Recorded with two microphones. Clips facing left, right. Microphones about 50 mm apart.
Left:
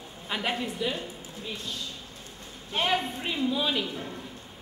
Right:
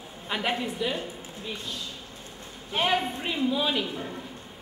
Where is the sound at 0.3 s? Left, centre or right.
Centre.